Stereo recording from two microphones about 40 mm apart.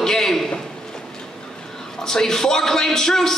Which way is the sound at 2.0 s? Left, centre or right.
Centre.